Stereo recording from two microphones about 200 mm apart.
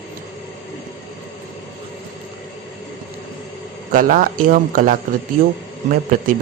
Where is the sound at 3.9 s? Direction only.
45° right (ahead or behind).